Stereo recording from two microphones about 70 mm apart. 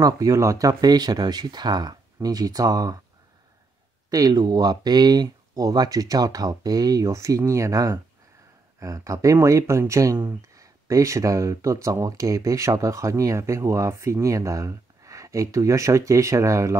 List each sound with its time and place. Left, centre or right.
0.0 s speech: right
2.1 s speech: right
4.1 s speech: right